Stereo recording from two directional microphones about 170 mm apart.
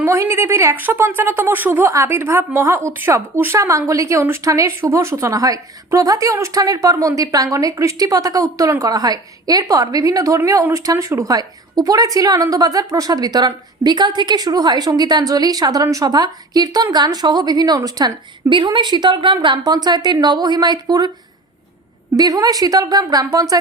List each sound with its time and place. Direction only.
0.0 s speech: 15° right (ahead or behind)
22.1 s speech: 20° right (ahead or behind)